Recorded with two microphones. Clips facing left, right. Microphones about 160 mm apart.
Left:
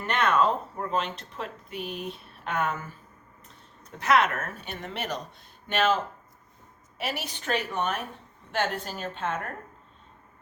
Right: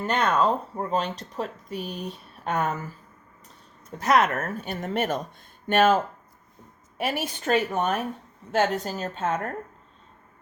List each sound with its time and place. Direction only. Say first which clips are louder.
0.1 s speech: right 1 dB; 35° right (ahead or behind)
4.0 s speech: right 2 dB; 45° right (ahead or behind)